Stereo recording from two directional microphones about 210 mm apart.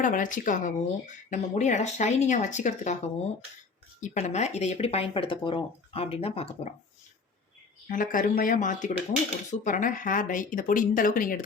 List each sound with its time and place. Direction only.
0.0 s speech: 40° left (ahead or behind)
7.9 s speech: 40° left (ahead or behind)